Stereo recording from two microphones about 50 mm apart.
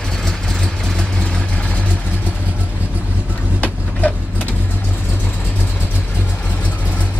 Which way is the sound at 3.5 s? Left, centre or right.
Left.